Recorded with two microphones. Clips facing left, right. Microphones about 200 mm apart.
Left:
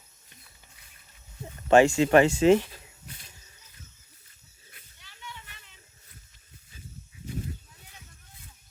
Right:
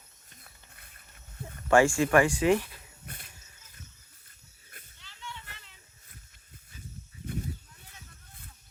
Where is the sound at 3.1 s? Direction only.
55° right (ahead or behind).